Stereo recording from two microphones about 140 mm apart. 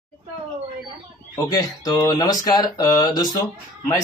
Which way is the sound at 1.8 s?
30° left (ahead or behind).